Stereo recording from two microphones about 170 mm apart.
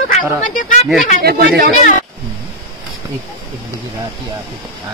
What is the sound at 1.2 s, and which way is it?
Speech, 70° right (ahead or behind).